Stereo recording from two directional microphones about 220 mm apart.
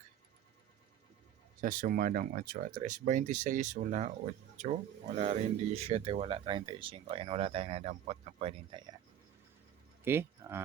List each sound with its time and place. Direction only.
1.6 s speech: 40° right (ahead or behind)
10.0 s speech: 10° right (ahead or behind)